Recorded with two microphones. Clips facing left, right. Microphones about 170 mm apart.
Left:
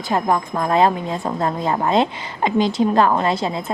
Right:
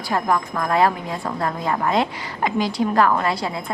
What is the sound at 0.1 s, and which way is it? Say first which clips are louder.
A woman's voice: left 2 dB; 25° left (ahead or behind).